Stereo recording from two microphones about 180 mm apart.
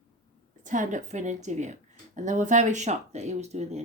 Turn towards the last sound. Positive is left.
turn(degrees=-40)  # may be behind; listen again after turning